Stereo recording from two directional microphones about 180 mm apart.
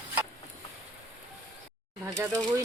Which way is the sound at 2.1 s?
20° right (ahead or behind).